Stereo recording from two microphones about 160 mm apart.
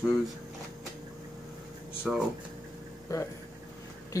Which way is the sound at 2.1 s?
5° right (ahead or behind).